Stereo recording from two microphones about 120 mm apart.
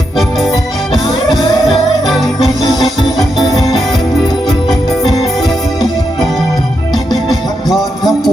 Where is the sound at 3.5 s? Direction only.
Centre (ahead or behind).